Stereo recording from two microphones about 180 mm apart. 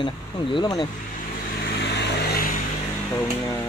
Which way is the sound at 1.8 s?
65° left (ahead or behind).